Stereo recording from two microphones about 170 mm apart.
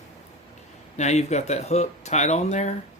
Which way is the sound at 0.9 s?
40° left (ahead or behind).